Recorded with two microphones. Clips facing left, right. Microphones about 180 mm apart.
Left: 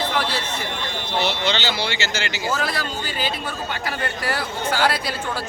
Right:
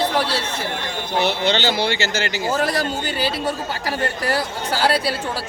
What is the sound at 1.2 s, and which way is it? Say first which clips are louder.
Speech: right 4 dB; 50° right (ahead or behind).